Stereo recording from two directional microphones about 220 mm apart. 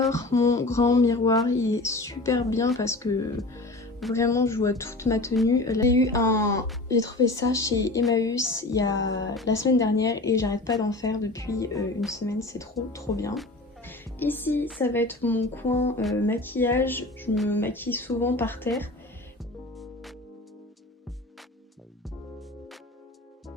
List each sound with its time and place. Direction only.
0.1 s speech: 15° left (ahead or behind)
9.0 s speech: 55° left (ahead or behind)
9.5 s speech: 15° left (ahead or behind)